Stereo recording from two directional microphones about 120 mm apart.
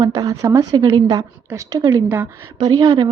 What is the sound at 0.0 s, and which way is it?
A woman's voice, 30° right (ahead or behind).